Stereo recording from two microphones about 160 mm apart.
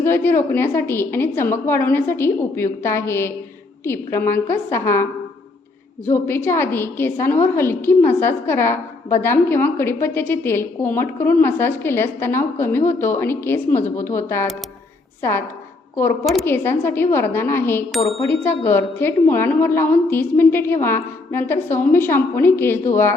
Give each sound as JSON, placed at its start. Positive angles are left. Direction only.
{"t": 0.0, "sound": "a woman's voice", "side_deg": 15}
{"t": 6.1, "sound": "a woman's voice", "side_deg": 15}
{"t": 16.5, "sound": "a woman's voice", "side_deg": 15}